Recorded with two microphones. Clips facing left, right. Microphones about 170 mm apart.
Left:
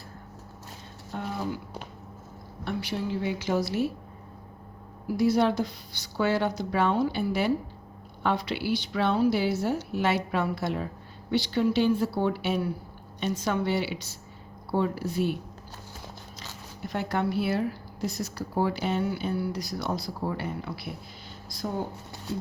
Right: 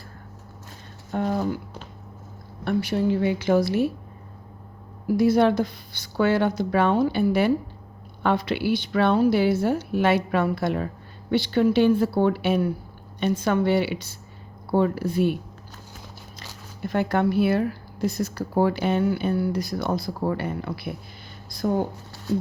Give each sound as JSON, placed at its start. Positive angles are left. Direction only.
{"t": 1.1, "sound": "speech", "side_deg": -55}
{"t": 2.6, "sound": "speech", "side_deg": -50}
{"t": 5.1, "sound": "speech", "side_deg": -55}
{"t": 16.8, "sound": "speech", "side_deg": -55}